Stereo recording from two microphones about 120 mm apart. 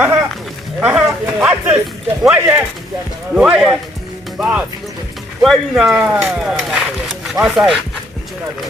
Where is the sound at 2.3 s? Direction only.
10° right (ahead or behind).